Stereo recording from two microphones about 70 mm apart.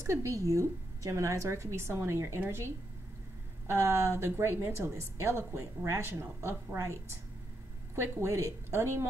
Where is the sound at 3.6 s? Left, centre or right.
Right.